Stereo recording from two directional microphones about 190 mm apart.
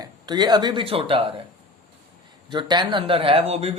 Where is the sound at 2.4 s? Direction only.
25° right (ahead or behind).